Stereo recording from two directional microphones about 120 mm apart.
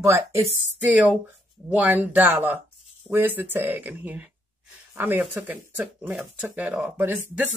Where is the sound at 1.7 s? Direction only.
15° right (ahead or behind).